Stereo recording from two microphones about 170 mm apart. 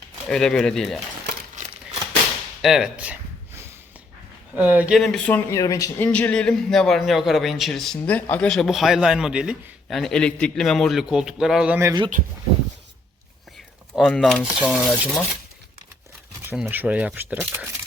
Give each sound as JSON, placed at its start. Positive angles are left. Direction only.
{"t": 0.3, "sound": "a man's voice", "side_deg": 5}
{"t": 2.6, "sound": "a sound", "side_deg": 0}
{"t": 4.5, "sound": "speech", "side_deg": -10}
{"t": 6.1, "sound": "a man's voice", "side_deg": 5}
{"t": 11.9, "sound": "speech", "side_deg": -25}
{"t": 14.1, "sound": "a man's voice", "side_deg": 5}
{"t": 16.5, "sound": "speech", "side_deg": -10}